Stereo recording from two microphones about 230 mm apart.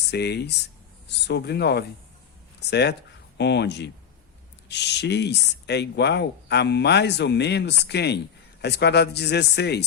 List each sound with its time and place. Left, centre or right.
0.1 s speech: left